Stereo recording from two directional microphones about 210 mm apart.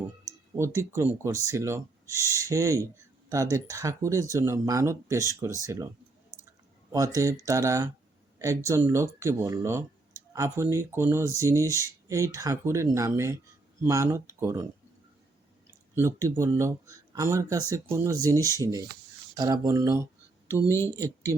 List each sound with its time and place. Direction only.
0.5 s speech: 15° right (ahead or behind)
2.0 s speech: 15° left (ahead or behind)
2.4 s speech: 15° right (ahead or behind)
6.9 s speech: 15° right (ahead or behind)
16.0 s speech: 15° right (ahead or behind)
18.3 s speech: 15° left (ahead or behind)
18.6 s speech: 15° right (ahead or behind)
20.7 s speech: 10° left (ahead or behind)